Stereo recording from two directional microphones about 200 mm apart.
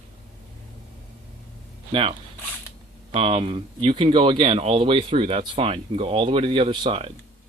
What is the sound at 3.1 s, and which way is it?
Speech, 25° right (ahead or behind).